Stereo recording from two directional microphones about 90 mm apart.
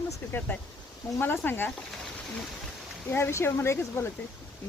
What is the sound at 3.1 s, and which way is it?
Speech, 30° left (ahead or behind).